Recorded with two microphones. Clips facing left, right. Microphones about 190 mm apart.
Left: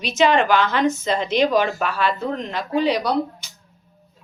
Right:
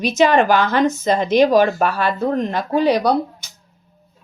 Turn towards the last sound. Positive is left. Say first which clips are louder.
# right 4 dB
turn(degrees=-45)  # may be behind; listen again after turning